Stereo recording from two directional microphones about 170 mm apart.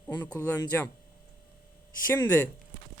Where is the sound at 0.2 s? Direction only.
10° left (ahead or behind).